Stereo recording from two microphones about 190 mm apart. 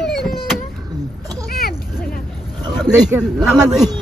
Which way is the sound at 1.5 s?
50° left (ahead or behind).